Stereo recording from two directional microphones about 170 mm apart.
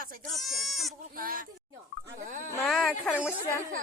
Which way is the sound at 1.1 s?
55° right (ahead or behind).